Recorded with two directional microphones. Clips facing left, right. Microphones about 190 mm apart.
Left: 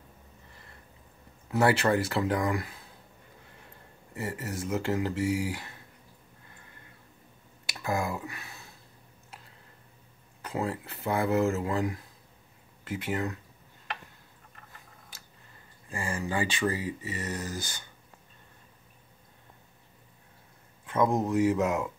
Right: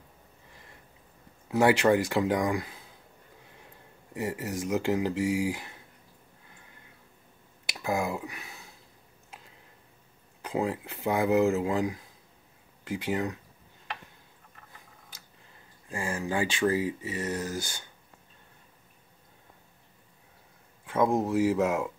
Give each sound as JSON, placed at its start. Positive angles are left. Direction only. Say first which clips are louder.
{"t": 1.5, "sound": "speech", "louder": "right 2 dB", "side_deg": -15}
{"t": 4.1, "sound": "speech", "louder": "right 3 dB", "side_deg": -15}
{"t": 7.7, "sound": "speech", "louder": "right 1 dB", "side_deg": -15}
{"t": 10.4, "sound": "speech", "louder": "right 3 dB", "side_deg": -15}
{"t": 15.9, "sound": "speech", "louder": "right 1 dB", "side_deg": -10}
{"t": 20.8, "sound": "speech", "louder": "right 1 dB", "side_deg": -10}